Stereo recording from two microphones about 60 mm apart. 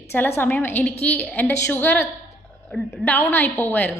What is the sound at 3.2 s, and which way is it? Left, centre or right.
Speech, left.